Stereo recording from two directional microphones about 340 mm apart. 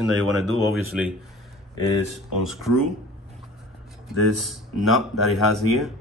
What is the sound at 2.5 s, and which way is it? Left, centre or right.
Speech, centre.